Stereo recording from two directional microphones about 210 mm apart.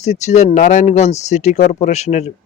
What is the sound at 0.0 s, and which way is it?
Speech, 35° left (ahead or behind).